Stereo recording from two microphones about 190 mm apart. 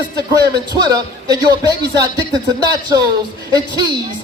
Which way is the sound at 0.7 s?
20° right (ahead or behind).